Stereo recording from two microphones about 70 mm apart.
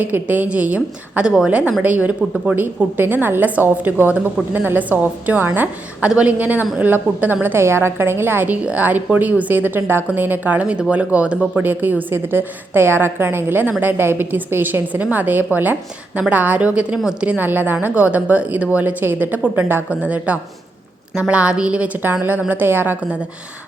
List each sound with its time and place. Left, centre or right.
0.0 s a woman's voice: right